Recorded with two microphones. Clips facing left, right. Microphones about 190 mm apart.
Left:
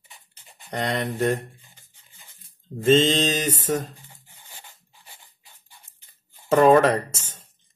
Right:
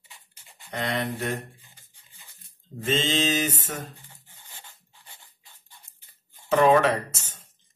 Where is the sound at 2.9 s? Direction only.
40° left (ahead or behind).